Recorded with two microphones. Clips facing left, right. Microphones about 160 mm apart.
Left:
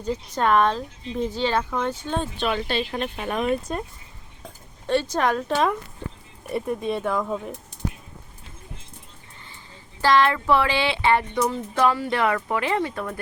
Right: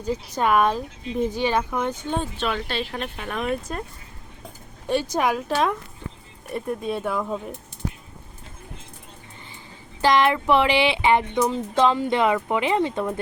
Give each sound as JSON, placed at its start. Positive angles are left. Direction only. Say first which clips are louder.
{"t": 0.0, "sound": "a woman's voice", "louder": "even", "side_deg": -10}
{"t": 2.6, "sound": "speech", "louder": "left 3 dB", "side_deg": 0}
{"t": 3.2, "sound": "speech", "louder": "left 4 dB", "side_deg": 20}
{"t": 4.9, "sound": "a woman's voice", "louder": "even", "side_deg": -10}
{"t": 10.0, "sound": "speech", "louder": "even", "side_deg": -15}